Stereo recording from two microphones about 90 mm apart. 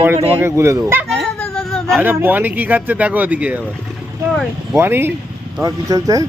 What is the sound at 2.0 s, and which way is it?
Speech, 20° right (ahead or behind).